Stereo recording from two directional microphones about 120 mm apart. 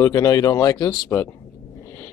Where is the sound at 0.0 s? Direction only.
30° left (ahead or behind).